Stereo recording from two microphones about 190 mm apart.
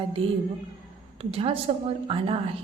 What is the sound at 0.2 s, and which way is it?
A woman's voice, 30° right (ahead or behind).